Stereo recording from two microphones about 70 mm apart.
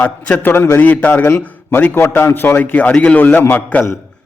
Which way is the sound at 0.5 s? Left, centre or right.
Left.